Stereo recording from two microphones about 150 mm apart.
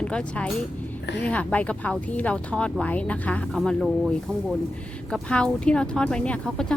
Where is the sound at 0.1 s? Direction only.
5° left (ahead or behind).